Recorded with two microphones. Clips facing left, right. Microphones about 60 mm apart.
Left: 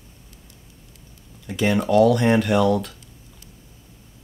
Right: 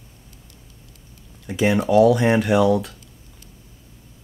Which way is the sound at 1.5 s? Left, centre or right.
Centre.